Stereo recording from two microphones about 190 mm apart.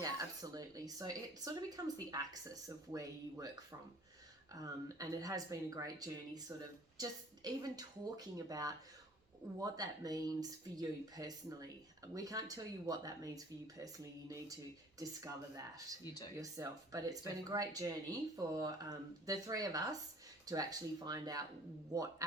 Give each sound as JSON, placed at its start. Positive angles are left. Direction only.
{"t": 0.0, "sound": "speech", "side_deg": -20}